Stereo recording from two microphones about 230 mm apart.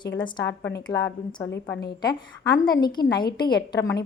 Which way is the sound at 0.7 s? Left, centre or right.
Centre.